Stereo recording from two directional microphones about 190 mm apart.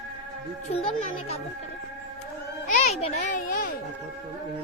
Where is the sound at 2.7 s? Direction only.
35° left (ahead or behind).